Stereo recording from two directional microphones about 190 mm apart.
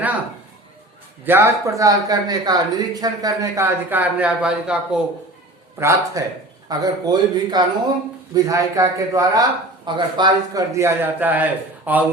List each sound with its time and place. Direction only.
1.2 s a man's voice: 10° right (ahead or behind)